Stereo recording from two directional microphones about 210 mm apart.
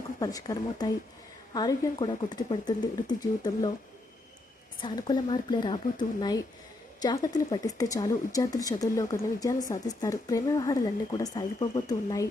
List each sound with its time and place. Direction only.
0.2 s speech: 15° left (ahead or behind)
4.8 s speech: 20° left (ahead or behind)